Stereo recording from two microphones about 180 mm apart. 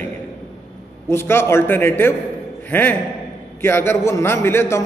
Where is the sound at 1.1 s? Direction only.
15° left (ahead or behind).